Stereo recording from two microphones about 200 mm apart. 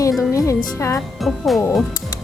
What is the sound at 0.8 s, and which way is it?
Speech, 15° left (ahead or behind).